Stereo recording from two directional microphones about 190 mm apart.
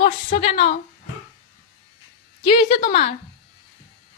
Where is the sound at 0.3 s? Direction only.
30° left (ahead or behind).